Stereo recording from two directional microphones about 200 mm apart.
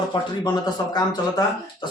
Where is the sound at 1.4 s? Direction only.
20° left (ahead or behind).